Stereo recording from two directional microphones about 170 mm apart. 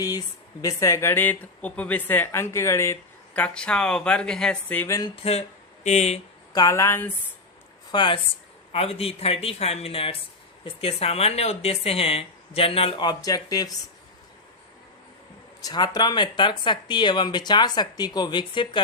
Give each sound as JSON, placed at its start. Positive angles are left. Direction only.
{"t": 0.6, "sound": "a woman's voice", "side_deg": 20}
{"t": 4.9, "sound": "a sound", "side_deg": 30}
{"t": 6.5, "sound": "a woman's voice", "side_deg": 20}
{"t": 7.9, "sound": "speech", "side_deg": 25}
{"t": 15.6, "sound": "speech", "side_deg": 25}